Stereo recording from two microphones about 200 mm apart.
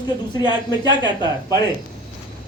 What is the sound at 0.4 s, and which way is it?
Speech, 20° left (ahead or behind).